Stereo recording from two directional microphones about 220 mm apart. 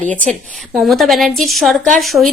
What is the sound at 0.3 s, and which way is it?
A woman's voice, centre (ahead or behind).